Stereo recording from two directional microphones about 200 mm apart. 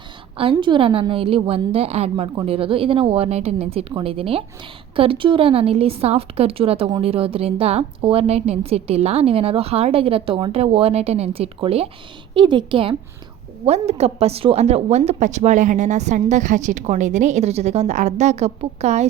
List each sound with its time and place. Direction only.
0.3 s a woman's voice: 25° right (ahead or behind)